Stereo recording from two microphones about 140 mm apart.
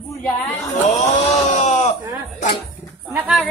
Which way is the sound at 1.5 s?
55° left (ahead or behind).